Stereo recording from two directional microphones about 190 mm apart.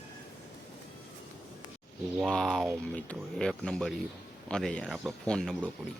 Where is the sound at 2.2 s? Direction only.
Centre (ahead or behind).